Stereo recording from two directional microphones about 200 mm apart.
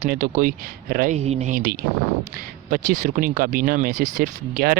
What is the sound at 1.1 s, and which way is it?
Speech, 35° right (ahead or behind).